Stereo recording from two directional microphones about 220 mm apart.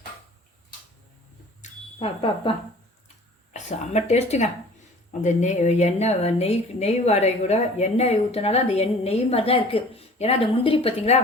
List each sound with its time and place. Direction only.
2.0 s speech: 25° left (ahead or behind)
3.5 s speech: 30° left (ahead or behind)